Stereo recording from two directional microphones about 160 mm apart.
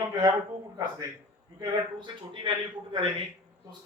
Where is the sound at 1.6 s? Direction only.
30° right (ahead or behind).